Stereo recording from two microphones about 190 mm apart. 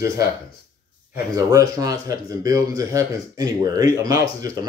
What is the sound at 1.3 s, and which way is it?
Speech, 20° right (ahead or behind).